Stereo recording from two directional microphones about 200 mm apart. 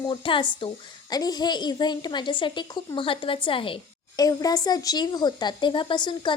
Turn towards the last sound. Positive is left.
turn(degrees=25)  # may be behind; listen again after turning